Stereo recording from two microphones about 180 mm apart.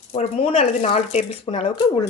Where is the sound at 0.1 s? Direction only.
35° left (ahead or behind).